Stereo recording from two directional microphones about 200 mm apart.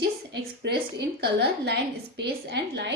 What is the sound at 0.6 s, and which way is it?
A woman's voice, 55° right (ahead or behind).